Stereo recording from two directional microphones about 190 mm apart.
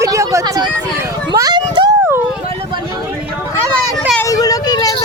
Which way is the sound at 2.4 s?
30° right (ahead or behind).